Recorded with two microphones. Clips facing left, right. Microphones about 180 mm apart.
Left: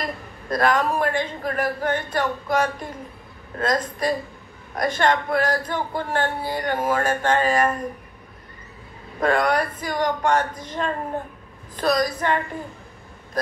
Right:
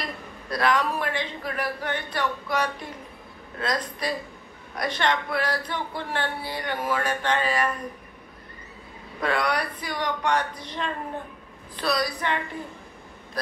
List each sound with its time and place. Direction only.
0.0 s speech: 45° left (ahead or behind)
9.2 s speech: 45° left (ahead or behind)